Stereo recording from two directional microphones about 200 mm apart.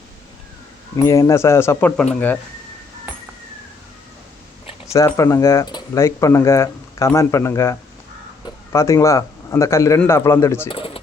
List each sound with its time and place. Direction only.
1.0 s speech: 15° left (ahead or behind)
4.9 s speech: 15° left (ahead or behind)
10.7 s a sound: 25° left (ahead or behind)